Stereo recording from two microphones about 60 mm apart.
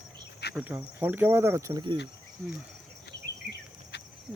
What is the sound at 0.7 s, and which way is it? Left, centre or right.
Speech, right.